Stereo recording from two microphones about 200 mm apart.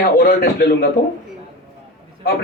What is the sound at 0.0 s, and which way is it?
Speech, 50° left (ahead or behind).